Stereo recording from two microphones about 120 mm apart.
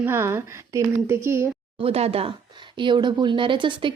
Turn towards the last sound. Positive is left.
turn(degrees=-40)  # may be behind; listen again after turning